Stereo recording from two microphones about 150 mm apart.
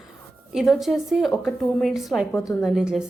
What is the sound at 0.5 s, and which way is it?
Speech, centre (ahead or behind).